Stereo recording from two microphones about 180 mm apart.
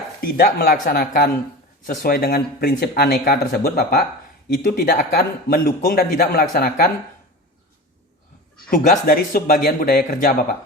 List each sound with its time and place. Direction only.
0.2 s speech: 60° left (ahead or behind)
8.7 s speech: 50° left (ahead or behind)